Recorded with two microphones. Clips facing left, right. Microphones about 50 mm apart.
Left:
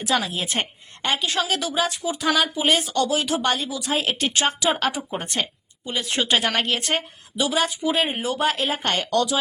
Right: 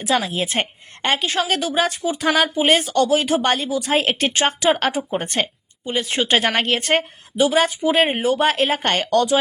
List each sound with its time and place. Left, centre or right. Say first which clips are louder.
0.3 s speech: right 4 dB; right